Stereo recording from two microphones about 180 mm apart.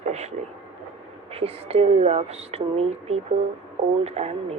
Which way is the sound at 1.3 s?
35° right (ahead or behind).